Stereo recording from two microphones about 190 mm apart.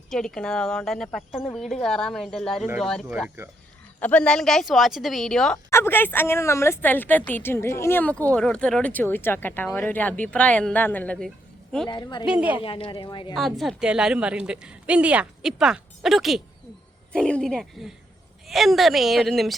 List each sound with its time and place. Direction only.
0.1 s a woman's voice: centre (ahead or behind)
3.2 s a woman's voice: 10° right (ahead or behind)
4.0 s a woman's voice: 5° left (ahead or behind)
11.9 s speech: 25° left (ahead or behind)
12.2 s a woman's voice: 5° right (ahead or behind)
12.6 s speech: 25° left (ahead or behind)
13.3 s a woman's voice: centre (ahead or behind)